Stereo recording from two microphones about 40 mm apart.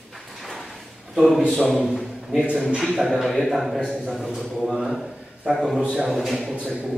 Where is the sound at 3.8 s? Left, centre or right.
Centre.